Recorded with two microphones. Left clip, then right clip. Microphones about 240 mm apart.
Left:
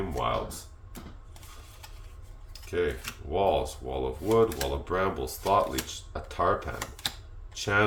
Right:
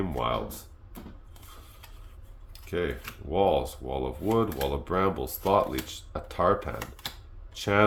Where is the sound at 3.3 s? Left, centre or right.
Right.